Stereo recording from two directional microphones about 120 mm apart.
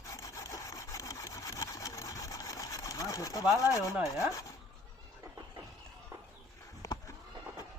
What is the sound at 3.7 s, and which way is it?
Chopping, 30° left (ahead or behind).